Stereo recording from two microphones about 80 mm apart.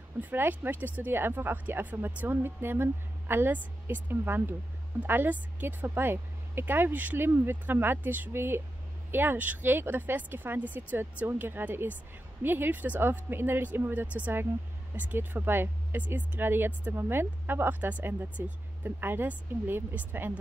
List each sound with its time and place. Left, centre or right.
0.2 s speech: right